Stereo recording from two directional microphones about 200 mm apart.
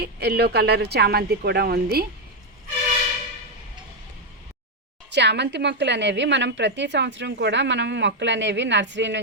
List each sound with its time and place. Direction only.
0.0 s a woman's voice: 55° right (ahead or behind)
5.1 s a woman's voice: 60° right (ahead or behind)